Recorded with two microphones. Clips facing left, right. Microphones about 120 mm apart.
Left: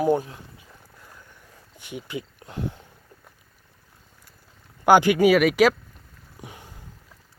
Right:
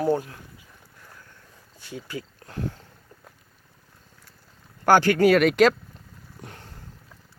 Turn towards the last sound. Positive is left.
turn(degrees=10)  # may be behind; listen again after turning